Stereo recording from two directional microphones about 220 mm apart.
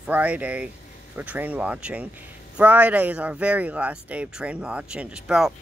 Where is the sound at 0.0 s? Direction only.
5° right (ahead or behind).